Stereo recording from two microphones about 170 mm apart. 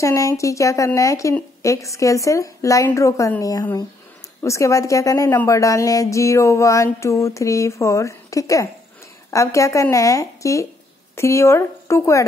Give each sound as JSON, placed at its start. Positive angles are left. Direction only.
{"t": 0.0, "sound": "a woman's voice", "side_deg": 20}